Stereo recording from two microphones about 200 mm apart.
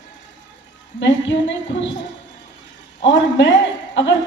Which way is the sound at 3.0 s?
60° left (ahead or behind).